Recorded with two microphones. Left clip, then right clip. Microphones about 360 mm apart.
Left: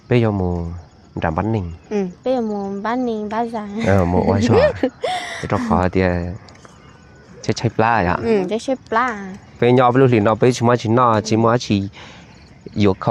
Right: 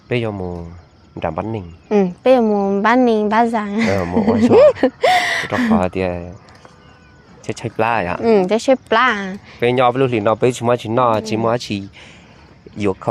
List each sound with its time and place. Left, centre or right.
0.1 s speech: left
1.9 s a woman's voice: right
5.7 s speech: left
7.4 s speech: left
8.2 s speech: right
9.6 s speech: left